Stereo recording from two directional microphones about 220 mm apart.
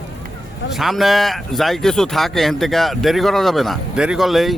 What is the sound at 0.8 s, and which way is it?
Speech, centre (ahead or behind).